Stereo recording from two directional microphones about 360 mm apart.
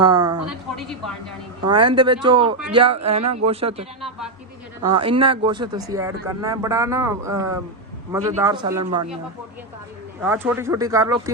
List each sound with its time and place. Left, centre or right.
0.0 s speech: centre
0.8 s speech: centre
1.6 s speech: centre
4.9 s speech: centre
10.2 s speech: centre